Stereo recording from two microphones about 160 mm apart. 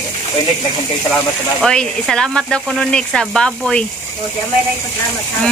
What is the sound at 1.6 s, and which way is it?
Speech, 5° left (ahead or behind).